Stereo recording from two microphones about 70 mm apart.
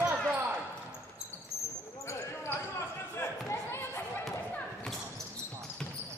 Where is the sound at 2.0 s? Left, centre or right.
Left.